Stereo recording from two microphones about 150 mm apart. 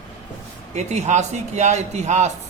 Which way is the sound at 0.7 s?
50° right (ahead or behind).